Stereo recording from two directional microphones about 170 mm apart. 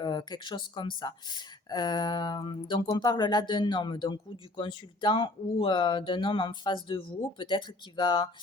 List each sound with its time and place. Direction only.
0.0 s speech: 25° left (ahead or behind)